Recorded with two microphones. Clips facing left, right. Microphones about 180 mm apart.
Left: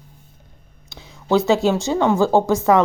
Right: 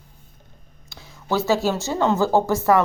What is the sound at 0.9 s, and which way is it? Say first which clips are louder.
Speech: left 6 dB; 20° left (ahead or behind).